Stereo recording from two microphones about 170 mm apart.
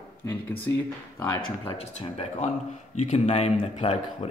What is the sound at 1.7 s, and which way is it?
Speech, 35° left (ahead or behind).